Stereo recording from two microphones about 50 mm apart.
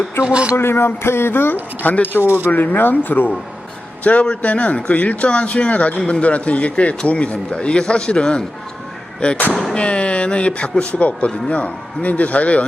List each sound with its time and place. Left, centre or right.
0.3 s a man's voice: right
0.5 s speech: left
2.2 s speech: right
2.5 s speech: left
4.0 s a man's voice: left
9.5 s speech: centre
9.7 s a man's voice: left